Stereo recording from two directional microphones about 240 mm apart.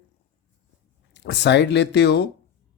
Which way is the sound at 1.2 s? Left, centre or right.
Left.